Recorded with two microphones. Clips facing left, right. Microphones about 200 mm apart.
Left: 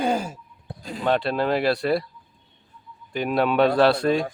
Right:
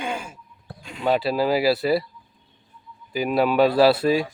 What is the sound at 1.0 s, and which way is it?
Speech, 5° right (ahead or behind).